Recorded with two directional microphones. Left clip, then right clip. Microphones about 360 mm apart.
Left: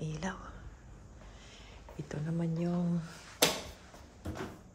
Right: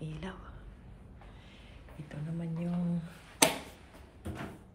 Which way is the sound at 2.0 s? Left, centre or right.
Centre.